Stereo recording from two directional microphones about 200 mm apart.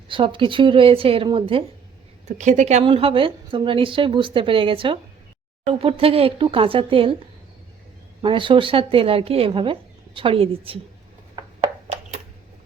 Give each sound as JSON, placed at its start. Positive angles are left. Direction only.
{"t": 0.1, "sound": "a woman's voice", "side_deg": -25}
{"t": 8.2, "sound": "a woman's voice", "side_deg": -25}